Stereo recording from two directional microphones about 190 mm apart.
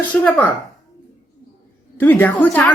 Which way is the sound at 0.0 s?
10° left (ahead or behind).